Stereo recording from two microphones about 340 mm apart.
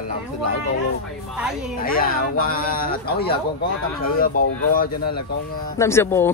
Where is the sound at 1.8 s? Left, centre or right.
Left.